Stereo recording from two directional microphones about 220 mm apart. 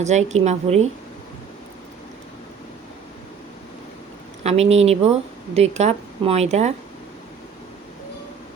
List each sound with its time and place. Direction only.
0.0 s a woman's voice: 30° right (ahead or behind)
4.4 s a woman's voice: 30° right (ahead or behind)